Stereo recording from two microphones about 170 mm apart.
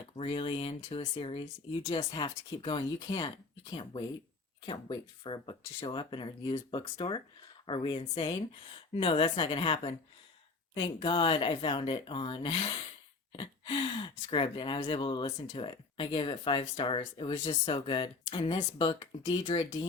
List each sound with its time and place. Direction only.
0.2 s speech: 30° left (ahead or behind)